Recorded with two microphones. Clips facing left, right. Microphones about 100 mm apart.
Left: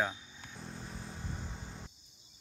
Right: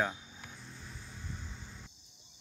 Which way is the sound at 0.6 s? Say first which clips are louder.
Left 5 dB; 40° left (ahead or behind).